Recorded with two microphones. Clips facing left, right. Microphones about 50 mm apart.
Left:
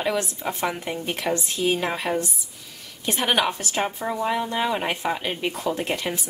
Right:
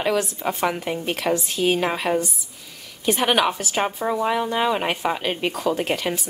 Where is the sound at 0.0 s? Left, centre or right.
Centre.